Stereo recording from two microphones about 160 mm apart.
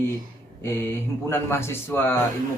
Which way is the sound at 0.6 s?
15° left (ahead or behind).